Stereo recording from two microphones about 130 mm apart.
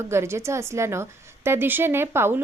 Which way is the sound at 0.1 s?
20° right (ahead or behind).